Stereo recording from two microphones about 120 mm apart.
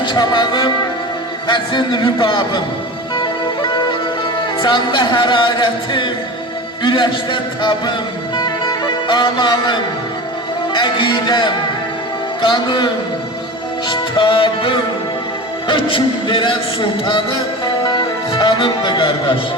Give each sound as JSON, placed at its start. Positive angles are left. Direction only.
{"t": 0.0, "sound": "music", "side_deg": 40}
{"t": 1.5, "sound": "a man's voice", "side_deg": 40}
{"t": 3.2, "sound": "music", "side_deg": 40}
{"t": 6.8, "sound": "a man's voice", "side_deg": 40}
{"t": 8.4, "sound": "music", "side_deg": 35}
{"t": 10.7, "sound": "a man's voice", "side_deg": 40}
{"t": 17.8, "sound": "music", "side_deg": 40}